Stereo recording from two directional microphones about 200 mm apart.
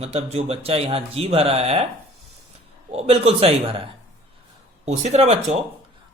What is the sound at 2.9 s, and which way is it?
Speech, 30° right (ahead or behind).